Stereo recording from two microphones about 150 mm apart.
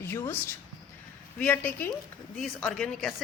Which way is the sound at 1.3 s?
10° left (ahead or behind).